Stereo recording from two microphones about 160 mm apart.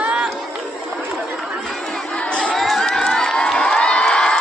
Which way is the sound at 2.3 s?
5° left (ahead or behind).